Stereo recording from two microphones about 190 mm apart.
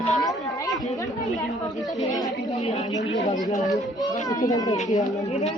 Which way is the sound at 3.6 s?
Centre (ahead or behind).